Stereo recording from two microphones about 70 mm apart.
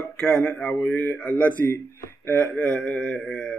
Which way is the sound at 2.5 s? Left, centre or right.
Centre.